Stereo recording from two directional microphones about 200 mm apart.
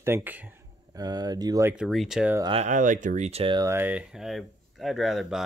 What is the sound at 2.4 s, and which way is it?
Speech, 25° right (ahead or behind).